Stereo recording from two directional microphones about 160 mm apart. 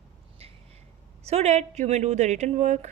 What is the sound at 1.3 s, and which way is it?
A woman's voice, 45° right (ahead or behind).